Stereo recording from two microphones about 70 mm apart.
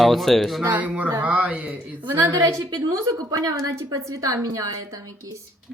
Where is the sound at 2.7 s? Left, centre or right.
Right.